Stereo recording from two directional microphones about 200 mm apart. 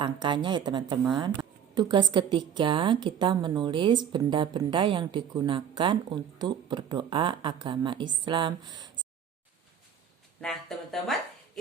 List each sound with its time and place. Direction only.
0.0 s a woman's voice: 25° right (ahead or behind)
10.4 s speech: centre (ahead or behind)